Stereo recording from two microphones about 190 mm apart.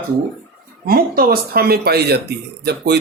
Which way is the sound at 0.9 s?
50° right (ahead or behind).